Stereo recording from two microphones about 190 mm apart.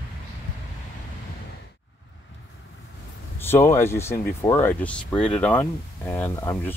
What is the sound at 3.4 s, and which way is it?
Speech, 15° left (ahead or behind).